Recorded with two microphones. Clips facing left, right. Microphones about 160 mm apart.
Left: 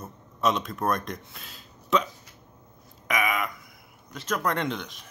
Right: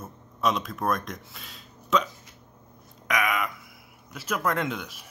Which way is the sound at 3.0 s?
Centre (ahead or behind).